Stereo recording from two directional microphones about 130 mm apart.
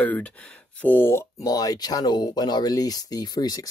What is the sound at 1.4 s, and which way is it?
Speech, 30° left (ahead or behind).